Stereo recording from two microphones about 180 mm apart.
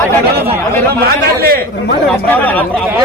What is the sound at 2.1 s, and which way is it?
Speech, 10° left (ahead or behind).